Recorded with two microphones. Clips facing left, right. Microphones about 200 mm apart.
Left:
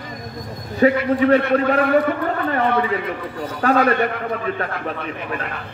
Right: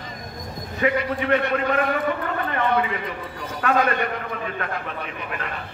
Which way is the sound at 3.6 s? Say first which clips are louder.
Left 5 dB; 35° left (ahead or behind).